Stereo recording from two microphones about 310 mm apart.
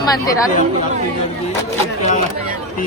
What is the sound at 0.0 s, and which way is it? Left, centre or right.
Speech, centre.